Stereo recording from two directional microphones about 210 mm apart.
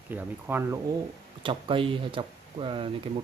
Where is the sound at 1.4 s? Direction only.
25° right (ahead or behind).